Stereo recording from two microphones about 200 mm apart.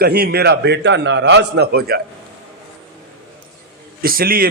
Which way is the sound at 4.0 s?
50° right (ahead or behind).